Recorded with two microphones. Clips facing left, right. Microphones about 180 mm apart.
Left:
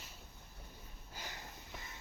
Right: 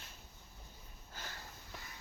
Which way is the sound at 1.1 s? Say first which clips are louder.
Left 1 dB; 15° left (ahead or behind).